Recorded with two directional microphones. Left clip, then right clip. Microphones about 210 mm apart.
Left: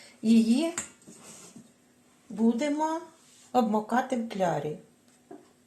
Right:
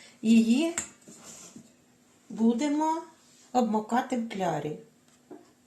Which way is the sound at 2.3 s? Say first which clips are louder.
Even; 15° left (ahead or behind).